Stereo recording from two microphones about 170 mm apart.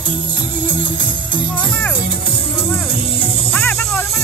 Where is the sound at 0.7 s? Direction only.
25° left (ahead or behind).